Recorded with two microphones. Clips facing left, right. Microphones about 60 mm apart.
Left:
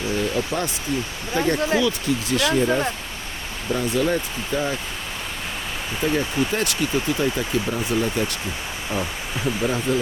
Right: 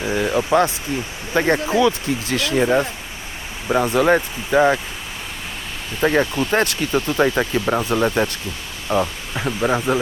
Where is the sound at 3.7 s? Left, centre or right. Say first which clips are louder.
Right 6 dB; right.